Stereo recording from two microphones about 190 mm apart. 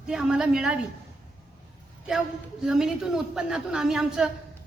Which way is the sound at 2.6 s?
Centre (ahead or behind).